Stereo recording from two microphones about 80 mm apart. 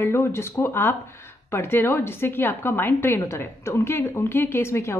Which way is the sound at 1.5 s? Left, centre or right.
Left.